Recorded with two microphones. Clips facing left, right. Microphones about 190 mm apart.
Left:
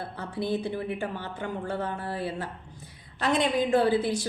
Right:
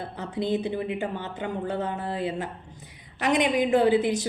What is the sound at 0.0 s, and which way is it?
A woman's voice, 20° right (ahead or behind).